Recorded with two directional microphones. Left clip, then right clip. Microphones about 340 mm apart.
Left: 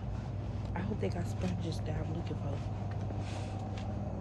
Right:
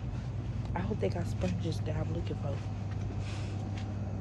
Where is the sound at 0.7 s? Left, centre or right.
Centre.